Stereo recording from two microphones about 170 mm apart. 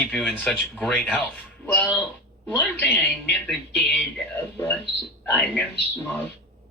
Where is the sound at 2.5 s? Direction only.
10° left (ahead or behind).